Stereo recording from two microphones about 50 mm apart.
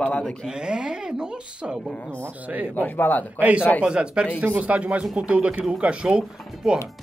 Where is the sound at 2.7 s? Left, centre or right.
Left.